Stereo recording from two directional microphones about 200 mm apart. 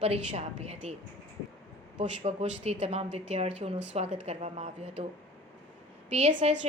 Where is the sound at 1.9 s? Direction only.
30° right (ahead or behind).